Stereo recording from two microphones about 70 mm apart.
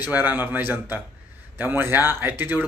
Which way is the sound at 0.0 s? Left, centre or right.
Right.